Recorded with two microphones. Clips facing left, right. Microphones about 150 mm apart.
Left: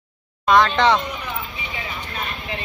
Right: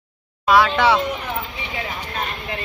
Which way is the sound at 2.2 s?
55° right (ahead or behind).